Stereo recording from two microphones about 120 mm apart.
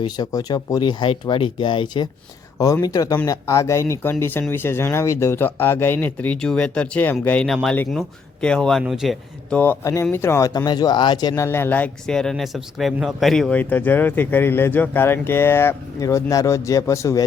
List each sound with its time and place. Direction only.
0.0 s speech: 35° left (ahead or behind); by 7.4 s 15° left (ahead or behind)
7.4 s speech: centre (ahead or behind)
9.5 s speech: 15° left (ahead or behind)
9.8 s speech: 25° left (ahead or behind)
11.4 s speech: 20° left (ahead or behind); by 13.6 s 5° left (ahead or behind)
13.6 s speech: 15° left (ahead or behind)